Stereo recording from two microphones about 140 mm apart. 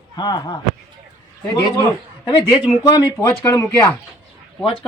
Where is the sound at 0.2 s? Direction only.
30° left (ahead or behind).